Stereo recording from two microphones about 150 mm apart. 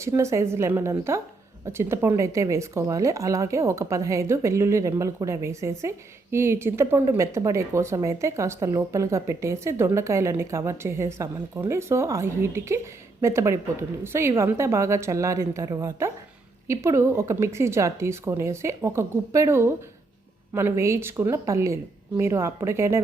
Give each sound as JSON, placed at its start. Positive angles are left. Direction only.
{"t": 0.0, "sound": "a woman's voice", "side_deg": -20}